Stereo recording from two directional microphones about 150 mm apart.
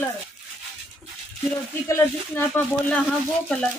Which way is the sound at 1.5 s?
15° left (ahead or behind).